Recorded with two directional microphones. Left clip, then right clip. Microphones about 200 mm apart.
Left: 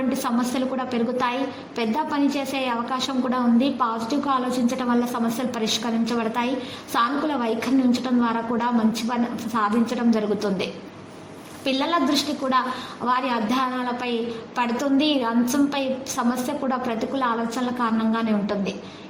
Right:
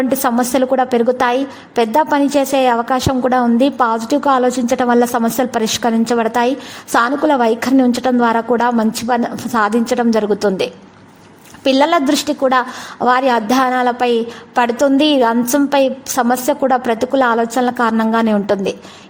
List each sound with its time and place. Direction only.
0.2 s a woman's voice: 50° right (ahead or behind)